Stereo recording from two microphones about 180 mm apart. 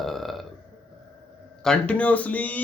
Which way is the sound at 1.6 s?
5° left (ahead or behind).